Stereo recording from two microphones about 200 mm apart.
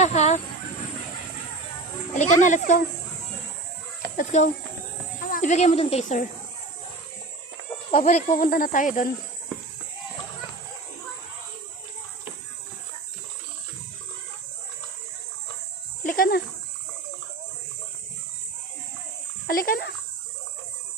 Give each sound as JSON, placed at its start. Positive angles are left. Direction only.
{"t": 0.0, "sound": "a sound", "side_deg": 35}
{"t": 2.1, "sound": "speech", "side_deg": 40}
{"t": 4.2, "sound": "speech", "side_deg": 35}
{"t": 7.9, "sound": "speech", "side_deg": 35}
{"t": 16.0, "sound": "snake", "side_deg": 45}
{"t": 19.5, "sound": "a sound", "side_deg": 50}